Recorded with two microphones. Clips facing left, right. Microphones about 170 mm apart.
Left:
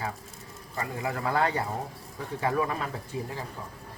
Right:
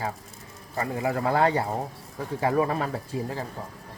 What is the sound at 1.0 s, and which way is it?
Speech, 30° right (ahead or behind).